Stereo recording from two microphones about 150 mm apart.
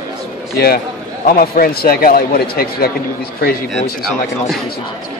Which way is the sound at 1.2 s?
80° left.